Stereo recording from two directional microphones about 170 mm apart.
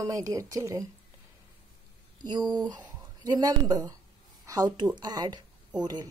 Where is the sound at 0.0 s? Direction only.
20° right (ahead or behind).